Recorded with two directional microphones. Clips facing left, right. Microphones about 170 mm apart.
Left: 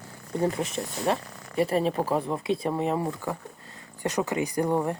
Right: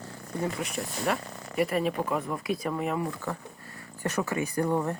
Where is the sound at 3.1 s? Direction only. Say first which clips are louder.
Left 3 dB; 15° left (ahead or behind).